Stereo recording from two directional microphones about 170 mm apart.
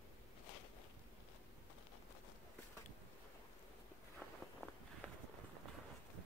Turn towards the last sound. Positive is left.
turn(degrees=10)  # may be behind; listen again after turning